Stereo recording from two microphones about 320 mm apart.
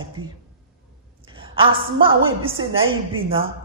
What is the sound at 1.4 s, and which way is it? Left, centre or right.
Speech, centre.